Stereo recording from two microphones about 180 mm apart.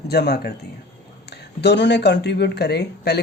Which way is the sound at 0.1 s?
65° left (ahead or behind).